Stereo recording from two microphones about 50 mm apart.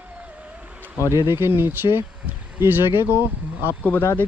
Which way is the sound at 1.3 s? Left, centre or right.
Right.